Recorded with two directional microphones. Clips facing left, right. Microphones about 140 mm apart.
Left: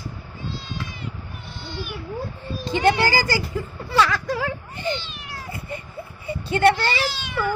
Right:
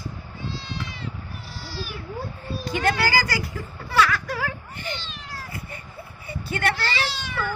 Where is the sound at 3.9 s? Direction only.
25° left (ahead or behind).